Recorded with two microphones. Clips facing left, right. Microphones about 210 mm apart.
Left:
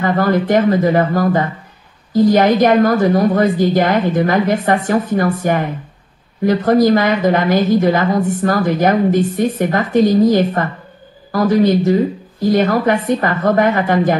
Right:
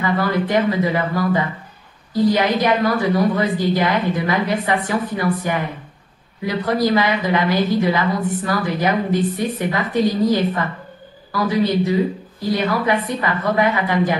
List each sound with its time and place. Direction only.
0.0 s a woman's voice: 45° left (ahead or behind)